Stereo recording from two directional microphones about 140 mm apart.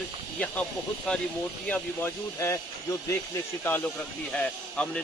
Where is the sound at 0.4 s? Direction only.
10° left (ahead or behind).